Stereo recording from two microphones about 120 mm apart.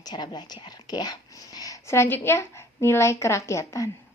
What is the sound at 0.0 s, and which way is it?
A woman's voice, 35° left (ahead or behind).